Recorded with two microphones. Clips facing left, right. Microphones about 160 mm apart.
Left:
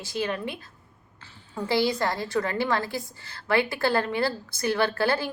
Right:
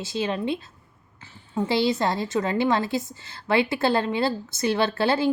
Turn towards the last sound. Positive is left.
turn(degrees=-20)  # may be behind; listen again after turning